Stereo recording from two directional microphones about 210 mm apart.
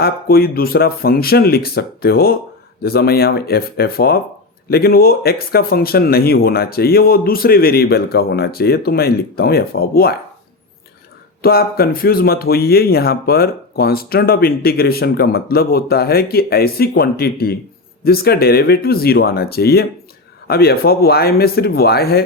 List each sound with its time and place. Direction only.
0.0 s speech: 45° left (ahead or behind)
11.4 s speech: 45° left (ahead or behind)